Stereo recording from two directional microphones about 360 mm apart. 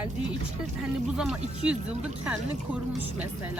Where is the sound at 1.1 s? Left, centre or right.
Centre.